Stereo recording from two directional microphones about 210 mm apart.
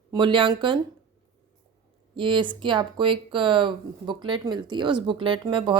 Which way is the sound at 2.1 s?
25° right (ahead or behind).